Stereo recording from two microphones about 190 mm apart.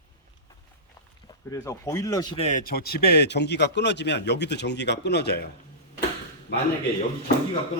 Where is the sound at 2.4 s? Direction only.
40° left (ahead or behind); by 5.4 s 60° left (ahead or behind).